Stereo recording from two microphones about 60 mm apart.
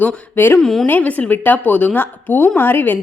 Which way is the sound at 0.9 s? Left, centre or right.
Left.